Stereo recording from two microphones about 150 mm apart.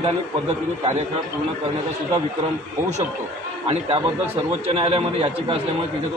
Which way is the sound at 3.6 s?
40° right (ahead or behind).